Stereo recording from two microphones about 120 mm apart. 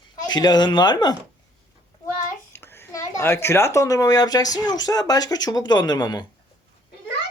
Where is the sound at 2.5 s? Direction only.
20° left (ahead or behind); by 6.2 s 35° left (ahead or behind).